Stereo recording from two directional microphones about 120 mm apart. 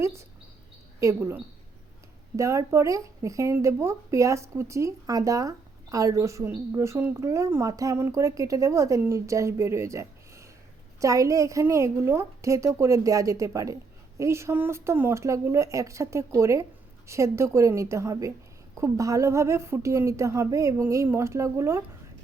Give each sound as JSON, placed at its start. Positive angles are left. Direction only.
{"t": 0.0, "sound": "a woman's voice", "side_deg": -25}